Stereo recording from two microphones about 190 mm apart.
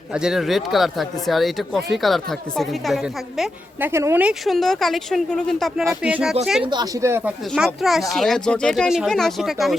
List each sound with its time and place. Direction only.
0.1 s speech: 5° right (ahead or behind)
6.6 s speech: 25° right (ahead or behind)
7.0 s speech: 15° right (ahead or behind)
7.5 s speech: centre (ahead or behind)